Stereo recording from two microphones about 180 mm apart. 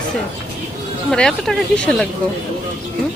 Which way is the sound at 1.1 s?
Centre (ahead or behind).